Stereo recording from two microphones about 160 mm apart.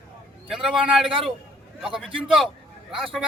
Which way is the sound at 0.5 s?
5° right (ahead or behind).